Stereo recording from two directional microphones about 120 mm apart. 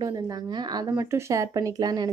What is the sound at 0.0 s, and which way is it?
Speech, 35° right (ahead or behind).